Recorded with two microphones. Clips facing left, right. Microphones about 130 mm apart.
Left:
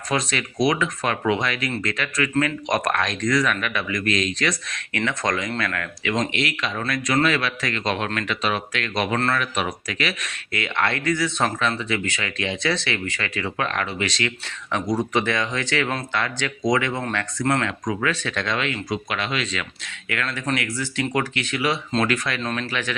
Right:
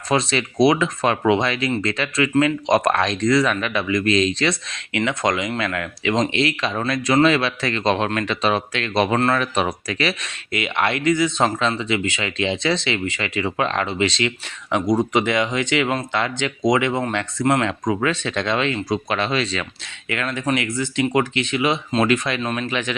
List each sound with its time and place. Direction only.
0.1 s speech: 30° right (ahead or behind)
20.1 s speech: 20° right (ahead or behind)